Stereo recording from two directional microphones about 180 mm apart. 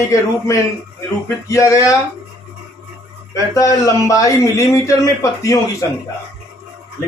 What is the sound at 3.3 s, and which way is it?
A man's voice, 20° left (ahead or behind).